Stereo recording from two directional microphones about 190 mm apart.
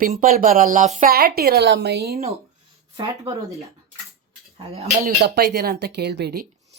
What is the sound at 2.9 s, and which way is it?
Speech, 20° right (ahead or behind).